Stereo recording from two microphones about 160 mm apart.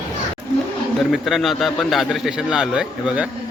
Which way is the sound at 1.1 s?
Centre (ahead or behind).